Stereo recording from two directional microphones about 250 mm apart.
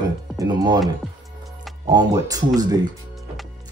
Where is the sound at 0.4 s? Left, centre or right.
Centre.